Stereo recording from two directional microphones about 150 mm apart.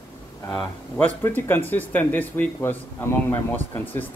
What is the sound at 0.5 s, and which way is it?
Speech, 5° left (ahead or behind).